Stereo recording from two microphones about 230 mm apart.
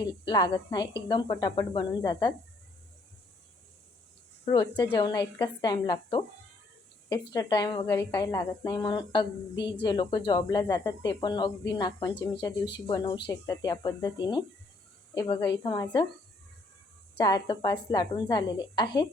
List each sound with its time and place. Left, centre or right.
0.3 s a woman's voice: centre
4.4 s a woman's voice: centre
7.3 s a woman's voice: centre
17.2 s a woman's voice: centre